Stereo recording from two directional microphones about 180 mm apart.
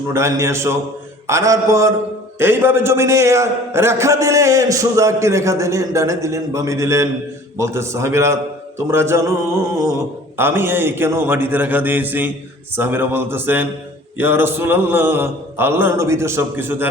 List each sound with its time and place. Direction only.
0.1 s a man's voice: 15° right (ahead or behind)